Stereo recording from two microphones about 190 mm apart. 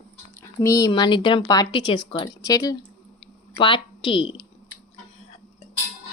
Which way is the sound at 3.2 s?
25° left (ahead or behind).